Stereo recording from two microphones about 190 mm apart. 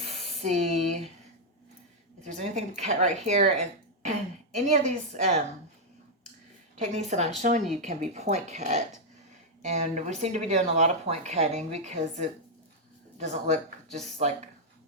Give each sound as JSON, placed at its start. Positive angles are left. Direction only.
{"t": 0.0, "sound": "spray", "side_deg": -35}
{"t": 2.2, "sound": "speech", "side_deg": -35}
{"t": 6.7, "sound": "speech", "side_deg": -40}